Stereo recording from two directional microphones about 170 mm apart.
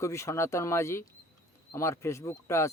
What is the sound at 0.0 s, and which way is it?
Speech, 15° left (ahead or behind).